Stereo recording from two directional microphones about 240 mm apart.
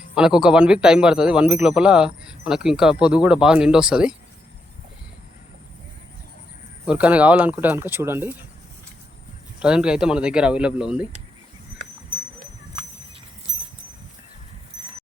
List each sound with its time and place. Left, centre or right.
0.1 s speech: centre
6.8 s speech: centre
9.6 s speech: centre